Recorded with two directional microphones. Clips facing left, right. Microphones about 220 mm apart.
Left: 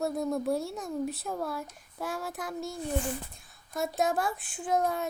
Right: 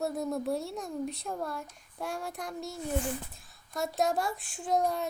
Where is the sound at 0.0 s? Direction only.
Centre (ahead or behind).